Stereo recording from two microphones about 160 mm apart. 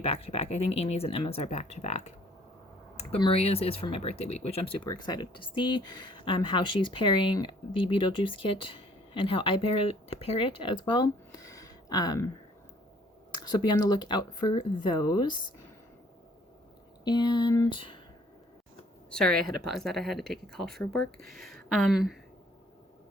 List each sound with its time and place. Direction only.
0.0 s speech: 40° left (ahead or behind)
3.0 s speech: 35° left (ahead or behind)
13.3 s speech: 25° left (ahead or behind)
17.0 s speech: 25° left (ahead or behind)
19.1 s speech: 5° left (ahead or behind)
19.4 s speech: 70° right (ahead or behind)
19.7 s speech: centre (ahead or behind)